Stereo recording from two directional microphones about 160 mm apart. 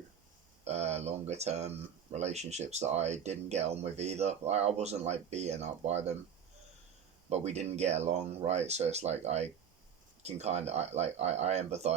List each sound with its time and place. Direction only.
0.6 s speech: 40° right (ahead or behind)
7.3 s speech: 45° right (ahead or behind)